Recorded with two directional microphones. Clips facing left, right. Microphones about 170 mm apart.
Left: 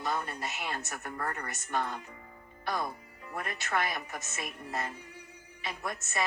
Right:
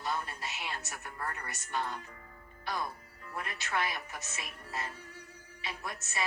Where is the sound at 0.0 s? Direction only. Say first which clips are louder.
Left 3 dB; 45° left (ahead or behind).